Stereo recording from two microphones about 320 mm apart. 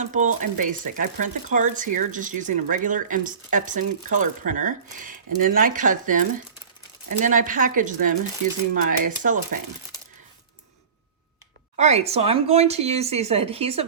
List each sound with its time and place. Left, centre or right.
0.0 s speech: right
11.8 s speech: centre